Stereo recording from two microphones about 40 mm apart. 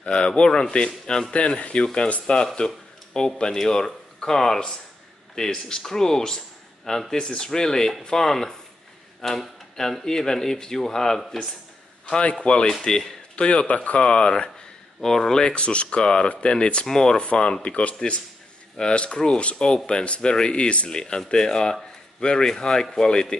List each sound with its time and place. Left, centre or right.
0.0 s speech: left
2.5 s a sound: centre
3.5 s speech: centre
12.1 s speech: left
13.5 s speech: left
15.0 s speech: centre
15.4 s speech: left
16.8 s speech: centre